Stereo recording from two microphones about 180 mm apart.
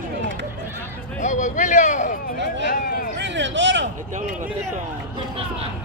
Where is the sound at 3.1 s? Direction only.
80° right.